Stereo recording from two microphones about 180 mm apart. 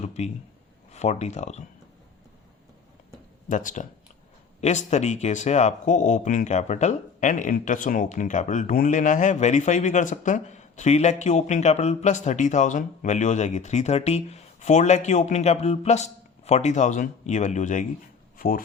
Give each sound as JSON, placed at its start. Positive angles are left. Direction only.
{"t": 0.0, "sound": "speech", "side_deg": 40}
{"t": 3.5, "sound": "speech", "side_deg": 45}